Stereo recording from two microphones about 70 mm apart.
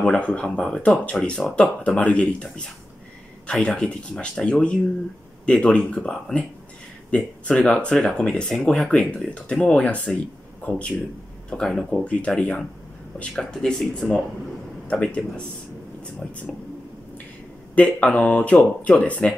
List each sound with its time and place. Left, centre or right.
0.0 s speech: centre
14.9 s speech: centre
17.7 s speech: centre